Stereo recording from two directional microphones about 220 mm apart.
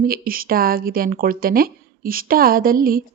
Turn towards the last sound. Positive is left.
turn(degrees=-40)  # may be behind; listen again after turning